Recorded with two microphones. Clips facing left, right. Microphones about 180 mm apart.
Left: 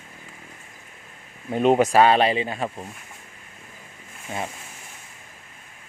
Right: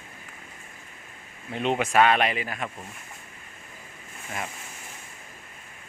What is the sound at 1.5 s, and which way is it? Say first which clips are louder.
Speech: left 8 dB; 40° left (ahead or behind).